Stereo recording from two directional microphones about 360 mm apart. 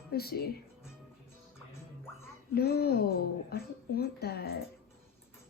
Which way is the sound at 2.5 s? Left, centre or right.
Left.